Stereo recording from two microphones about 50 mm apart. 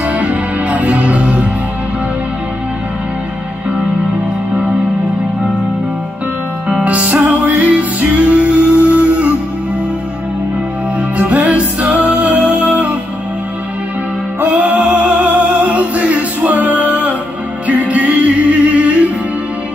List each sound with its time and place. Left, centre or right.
0.0 s music: right
6.7 s music: right
11.0 s music: right
14.4 s music: right